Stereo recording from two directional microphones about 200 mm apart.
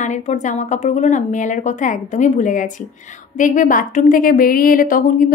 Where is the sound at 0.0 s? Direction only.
35° left (ahead or behind).